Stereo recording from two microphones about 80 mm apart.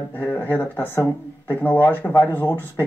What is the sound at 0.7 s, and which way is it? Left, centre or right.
Speech, left.